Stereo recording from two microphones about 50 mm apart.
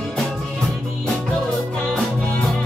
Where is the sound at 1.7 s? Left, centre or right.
Centre.